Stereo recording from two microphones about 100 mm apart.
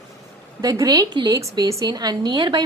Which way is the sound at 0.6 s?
40° right (ahead or behind).